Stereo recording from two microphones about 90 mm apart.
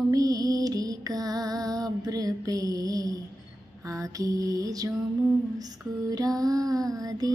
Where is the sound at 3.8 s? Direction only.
40° right (ahead or behind).